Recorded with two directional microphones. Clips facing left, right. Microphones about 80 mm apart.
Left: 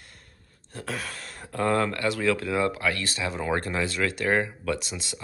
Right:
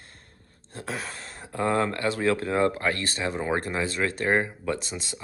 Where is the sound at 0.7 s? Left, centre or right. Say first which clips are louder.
Even; right.